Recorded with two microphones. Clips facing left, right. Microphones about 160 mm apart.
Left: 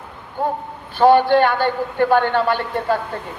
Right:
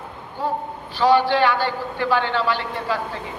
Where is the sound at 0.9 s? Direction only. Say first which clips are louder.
Left 4 dB; 55° left (ahead or behind).